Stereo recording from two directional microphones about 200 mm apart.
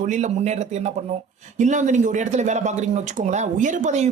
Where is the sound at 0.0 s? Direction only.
40° right (ahead or behind).